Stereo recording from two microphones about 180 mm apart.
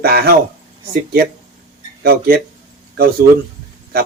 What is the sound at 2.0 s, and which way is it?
Speech, 60° right (ahead or behind).